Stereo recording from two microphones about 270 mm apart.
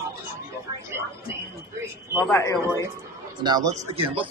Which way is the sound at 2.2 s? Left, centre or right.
Centre.